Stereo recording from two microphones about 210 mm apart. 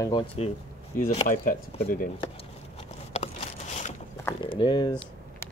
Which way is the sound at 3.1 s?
30° left (ahead or behind).